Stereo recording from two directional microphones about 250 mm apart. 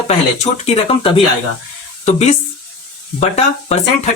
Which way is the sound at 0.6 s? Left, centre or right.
Left.